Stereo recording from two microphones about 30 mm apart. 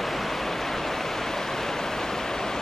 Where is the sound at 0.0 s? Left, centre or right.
Centre.